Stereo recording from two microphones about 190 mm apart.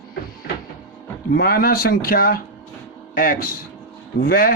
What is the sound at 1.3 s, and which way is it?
Speech, 50° left (ahead or behind).